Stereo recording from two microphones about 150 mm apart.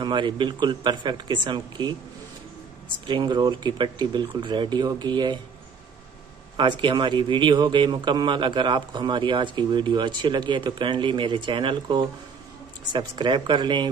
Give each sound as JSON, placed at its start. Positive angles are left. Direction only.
{"t": 0.0, "sound": "a man's voice", "side_deg": -30}
{"t": 3.1, "sound": "speech", "side_deg": -30}
{"t": 6.6, "sound": "a man's voice", "side_deg": -30}